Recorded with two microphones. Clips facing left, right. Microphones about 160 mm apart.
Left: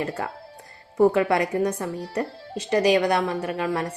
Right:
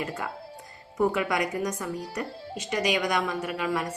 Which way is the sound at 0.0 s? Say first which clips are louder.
Left 4 dB; 35° left (ahead or behind).